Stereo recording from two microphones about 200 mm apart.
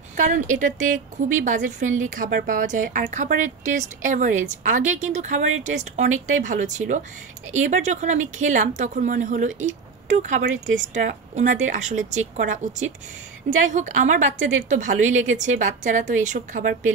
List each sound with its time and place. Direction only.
0.2 s a woman's voice: 40° right (ahead or behind)